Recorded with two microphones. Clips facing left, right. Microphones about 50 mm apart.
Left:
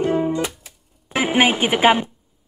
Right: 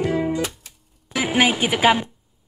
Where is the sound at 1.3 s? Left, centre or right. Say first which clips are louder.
Left 1 dB; left.